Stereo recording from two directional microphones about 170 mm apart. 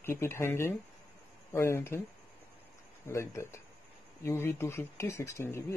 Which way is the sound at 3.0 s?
15° left (ahead or behind).